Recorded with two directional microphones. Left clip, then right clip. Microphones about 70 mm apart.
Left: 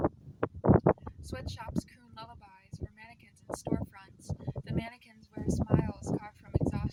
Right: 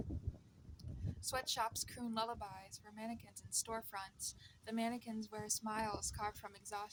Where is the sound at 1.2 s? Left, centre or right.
Left.